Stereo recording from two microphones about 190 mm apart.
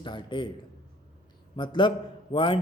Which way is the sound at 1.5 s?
25° left (ahead or behind).